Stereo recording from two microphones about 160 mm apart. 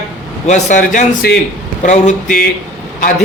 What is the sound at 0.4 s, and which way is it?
Speech, 50° left (ahead or behind).